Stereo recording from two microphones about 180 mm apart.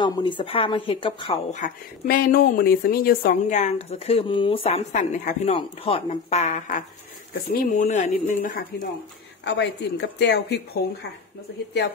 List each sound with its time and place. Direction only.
0.0 s speech: 25° left (ahead or behind)
1.5 s speech: 50° left (ahead or behind)
9.4 s speech: 70° left (ahead or behind)